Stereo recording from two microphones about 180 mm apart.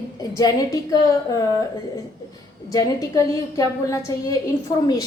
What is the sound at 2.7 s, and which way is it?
A woman's voice, 20° left (ahead or behind).